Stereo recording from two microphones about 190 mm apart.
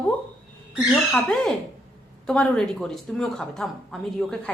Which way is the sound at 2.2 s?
5° left (ahead or behind).